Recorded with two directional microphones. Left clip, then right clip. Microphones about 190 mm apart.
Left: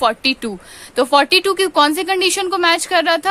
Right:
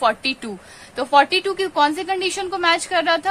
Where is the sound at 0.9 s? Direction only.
50° left (ahead or behind).